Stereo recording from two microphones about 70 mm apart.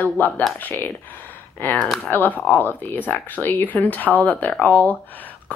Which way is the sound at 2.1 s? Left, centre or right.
Left.